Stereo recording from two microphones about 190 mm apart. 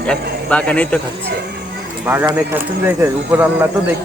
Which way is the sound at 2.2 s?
10° right (ahead or behind).